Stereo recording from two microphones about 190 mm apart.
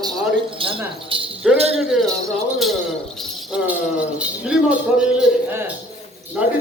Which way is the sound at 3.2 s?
5° right (ahead or behind).